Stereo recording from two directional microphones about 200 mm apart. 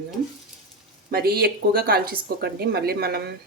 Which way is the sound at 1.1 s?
50° right (ahead or behind).